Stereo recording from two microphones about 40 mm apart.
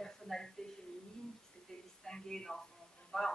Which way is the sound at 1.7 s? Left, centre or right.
Centre.